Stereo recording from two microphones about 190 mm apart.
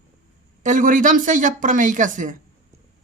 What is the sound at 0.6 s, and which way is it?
Speech, 40° right (ahead or behind).